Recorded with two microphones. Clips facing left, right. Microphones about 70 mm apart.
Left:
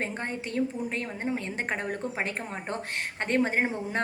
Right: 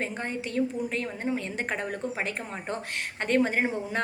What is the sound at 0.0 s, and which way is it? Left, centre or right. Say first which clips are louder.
A woman's voice: right 1 dB; left.